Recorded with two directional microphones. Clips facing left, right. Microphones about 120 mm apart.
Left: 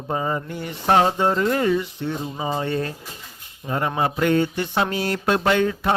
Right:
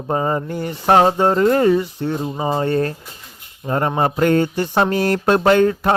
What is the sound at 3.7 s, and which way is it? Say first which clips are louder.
Mantra: right 4 dB; 45° right (ahead or behind).